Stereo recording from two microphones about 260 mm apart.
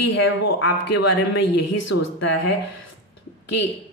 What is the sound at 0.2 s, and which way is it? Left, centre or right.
Speech, left.